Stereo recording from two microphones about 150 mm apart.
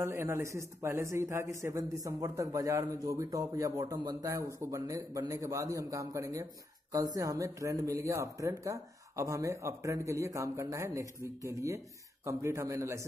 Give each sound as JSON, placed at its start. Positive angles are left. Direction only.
{"t": 0.0, "sound": "speech", "side_deg": -15}